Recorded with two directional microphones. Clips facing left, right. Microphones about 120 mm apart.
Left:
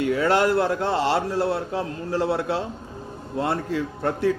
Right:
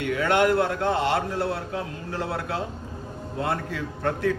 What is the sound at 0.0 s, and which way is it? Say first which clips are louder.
A man's voice: left 2 dB; 30° left (ahead or behind).